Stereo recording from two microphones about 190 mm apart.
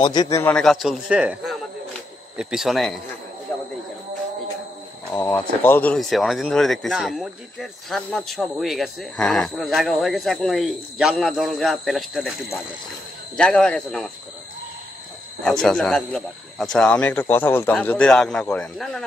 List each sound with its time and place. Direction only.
0.0 s speech: 20° left (ahead or behind); by 2.9 s centre (ahead or behind)
5.1 s speech: 10° left (ahead or behind)
15.4 s speech: 5° left (ahead or behind)